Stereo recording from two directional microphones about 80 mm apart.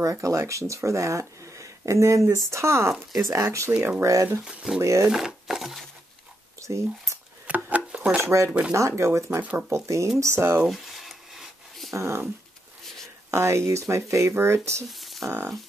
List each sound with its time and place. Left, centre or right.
0.0 s speech: right
4.6 s speech: centre
6.6 s speech: right
7.4 s a sound: centre
8.2 s speech: right
8.5 s speech: centre
8.7 s speech: right
9.4 s speech: right
9.7 s speech: right
10.7 s a sound: centre
11.9 s speech: right
13.3 s speech: right
14.9 s a sound: centre